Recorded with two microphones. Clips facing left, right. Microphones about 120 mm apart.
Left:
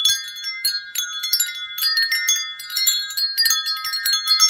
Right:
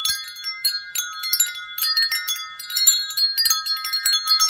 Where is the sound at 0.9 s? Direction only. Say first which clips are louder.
Right 1 dB; 45° right (ahead or behind).